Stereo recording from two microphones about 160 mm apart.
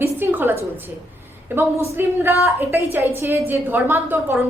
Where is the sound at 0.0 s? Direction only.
15° right (ahead or behind).